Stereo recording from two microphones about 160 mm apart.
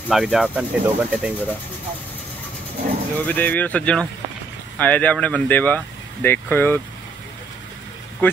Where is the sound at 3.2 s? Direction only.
10° left (ahead or behind).